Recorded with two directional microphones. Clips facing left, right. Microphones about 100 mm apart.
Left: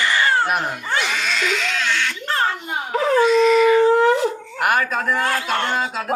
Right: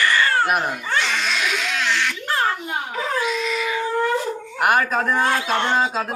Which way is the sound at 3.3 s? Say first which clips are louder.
Left 10 dB; centre (ahead or behind).